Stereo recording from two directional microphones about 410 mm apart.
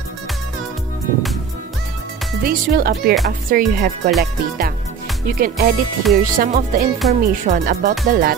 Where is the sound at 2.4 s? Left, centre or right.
Right.